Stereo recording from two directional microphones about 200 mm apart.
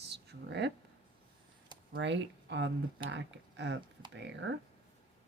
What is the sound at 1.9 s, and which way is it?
Speech, 60° right (ahead or behind).